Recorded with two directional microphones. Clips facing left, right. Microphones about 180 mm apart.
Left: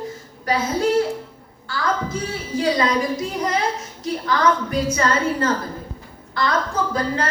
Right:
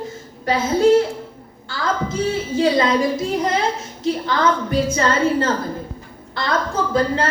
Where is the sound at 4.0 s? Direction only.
25° right (ahead or behind).